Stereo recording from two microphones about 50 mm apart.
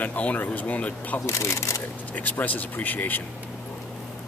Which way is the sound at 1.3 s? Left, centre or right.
Left.